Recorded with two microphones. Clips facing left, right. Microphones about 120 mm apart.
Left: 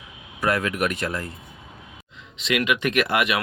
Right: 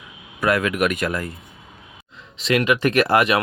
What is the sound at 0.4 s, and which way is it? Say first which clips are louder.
Speech: right 4 dB; 90° right.